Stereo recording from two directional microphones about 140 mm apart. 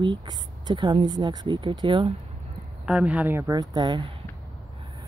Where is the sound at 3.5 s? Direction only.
30° right (ahead or behind).